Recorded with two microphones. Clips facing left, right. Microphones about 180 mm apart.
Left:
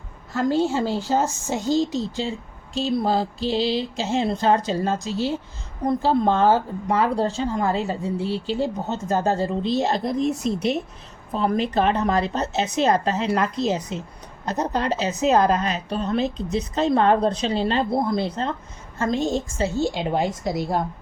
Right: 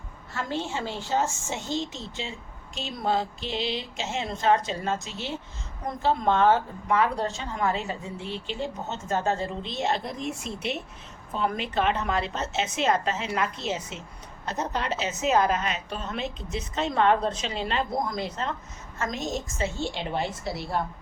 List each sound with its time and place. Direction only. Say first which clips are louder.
0.3 s speech: left 10 dB; 35° left (ahead or behind)